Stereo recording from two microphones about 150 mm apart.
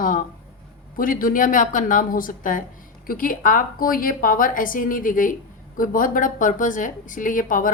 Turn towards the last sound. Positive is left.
turn(degrees=65)  # may be behind; listen again after turning